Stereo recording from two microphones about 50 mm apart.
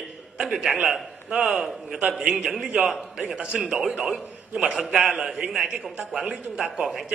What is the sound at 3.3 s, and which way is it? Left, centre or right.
Speech, right.